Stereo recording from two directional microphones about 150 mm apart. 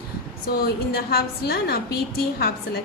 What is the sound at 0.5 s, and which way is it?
A woman's voice, 90° left.